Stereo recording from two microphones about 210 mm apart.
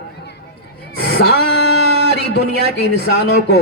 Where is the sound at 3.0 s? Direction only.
50° left (ahead or behind).